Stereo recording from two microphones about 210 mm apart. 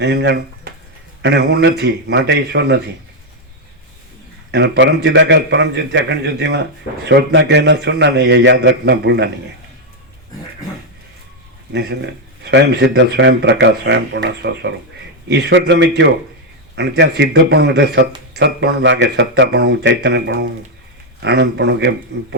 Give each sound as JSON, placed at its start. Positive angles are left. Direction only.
{"t": 0.0, "sound": "a man's voice", "side_deg": -55}
{"t": 4.5, "sound": "a man's voice", "side_deg": -55}
{"t": 11.7, "sound": "a man's voice", "side_deg": -55}